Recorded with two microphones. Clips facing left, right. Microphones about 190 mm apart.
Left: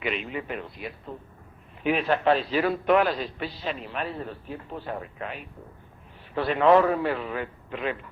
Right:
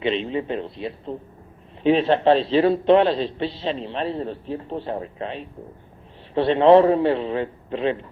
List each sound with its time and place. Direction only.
0.0 s a man's voice: 30° right (ahead or behind)